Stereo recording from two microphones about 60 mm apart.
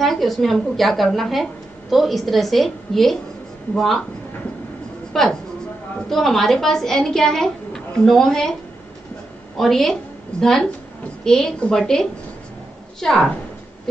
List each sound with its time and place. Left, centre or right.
0.0 s a woman's voice: centre
5.1 s a woman's voice: centre
9.6 s a woman's voice: centre
10.3 s a woman's voice: centre